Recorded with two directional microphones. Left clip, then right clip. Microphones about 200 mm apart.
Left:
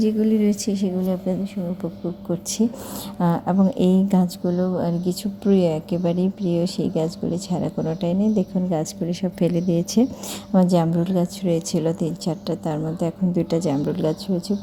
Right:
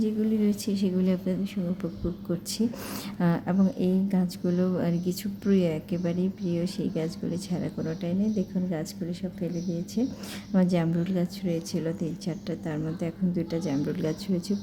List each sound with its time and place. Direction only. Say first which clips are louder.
0.0 s a woman's voice: left 7 dB; 25° left (ahead or behind)
0.9 s a woman's voice: left 1 dB; centre (ahead or behind)
3.2 s a woman's voice: left 7 dB; 10° left (ahead or behind)
3.8 s a woman's voice: left 8 dB; 30° left (ahead or behind)
4.4 s a woman's voice: left 2 dB; centre (ahead or behind); by 9.1 s 25° left (ahead or behind)
9.2 s a woman's voice: left 13 dB; 35° left (ahead or behind)
10.5 s a woman's voice: left 8 dB; 20° left (ahead or behind)